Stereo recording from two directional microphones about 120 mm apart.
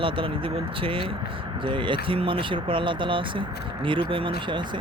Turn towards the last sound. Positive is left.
turn(degrees=-40)  # may be behind; listen again after turning